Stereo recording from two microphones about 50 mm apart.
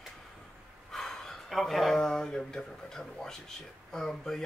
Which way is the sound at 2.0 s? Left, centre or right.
Centre.